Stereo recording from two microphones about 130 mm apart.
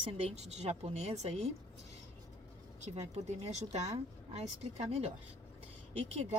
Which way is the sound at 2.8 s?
60° right (ahead or behind).